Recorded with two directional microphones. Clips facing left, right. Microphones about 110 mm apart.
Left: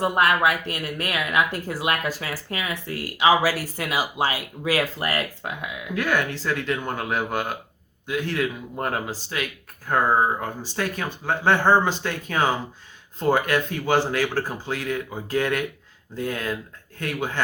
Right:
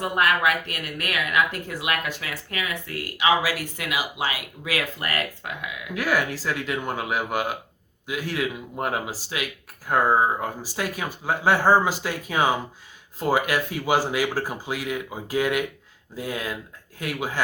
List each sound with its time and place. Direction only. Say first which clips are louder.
0.0 s speech: left 2 dB; 30° left (ahead or behind)
5.9 s speech: even; 5° right (ahead or behind)